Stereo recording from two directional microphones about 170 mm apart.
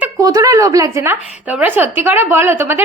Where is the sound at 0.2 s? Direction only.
20° right (ahead or behind).